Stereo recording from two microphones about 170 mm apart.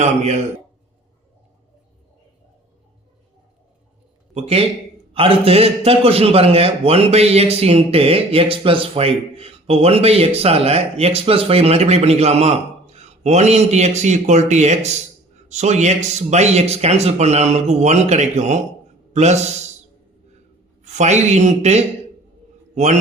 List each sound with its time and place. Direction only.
0.0 s a man's voice: 40° right (ahead or behind)
4.4 s a man's voice: 35° right (ahead or behind)
20.8 s a man's voice: 45° right (ahead or behind)